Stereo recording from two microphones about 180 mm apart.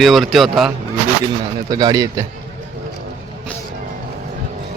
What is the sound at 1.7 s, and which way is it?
Speech, 20° right (ahead or behind).